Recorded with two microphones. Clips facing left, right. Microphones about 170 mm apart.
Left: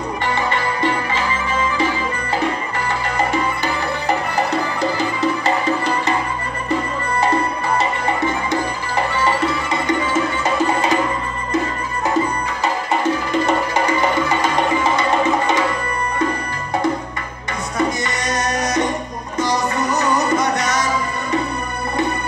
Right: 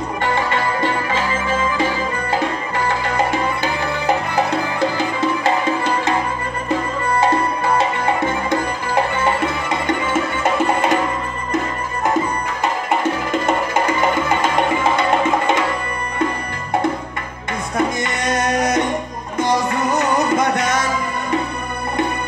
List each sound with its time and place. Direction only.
0.2 s music: 50° right (ahead or behind)
4.5 s music: 55° right (ahead or behind)
7.7 s music: 50° right (ahead or behind)
13.3 s music: 50° right (ahead or behind)
17.7 s music: 50° right (ahead or behind)